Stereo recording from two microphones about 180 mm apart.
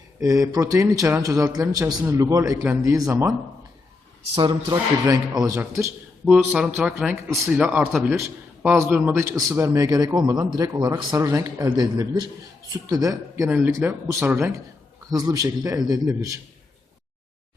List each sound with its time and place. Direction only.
0.2 s a man's voice: 20° right (ahead or behind)
4.4 s a man's voice: 25° right (ahead or behind)
6.2 s a man's voice: 5° right (ahead or behind)